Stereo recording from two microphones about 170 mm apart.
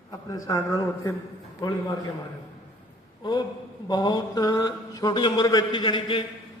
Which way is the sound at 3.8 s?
25° left (ahead or behind).